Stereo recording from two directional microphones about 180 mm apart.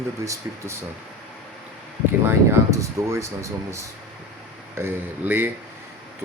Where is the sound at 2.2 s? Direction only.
15° right (ahead or behind).